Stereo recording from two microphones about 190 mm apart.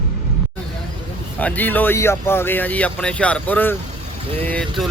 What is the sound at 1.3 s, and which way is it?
Speech, 10° left (ahead or behind).